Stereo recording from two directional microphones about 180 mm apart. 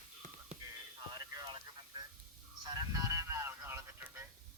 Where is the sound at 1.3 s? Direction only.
25° right (ahead or behind).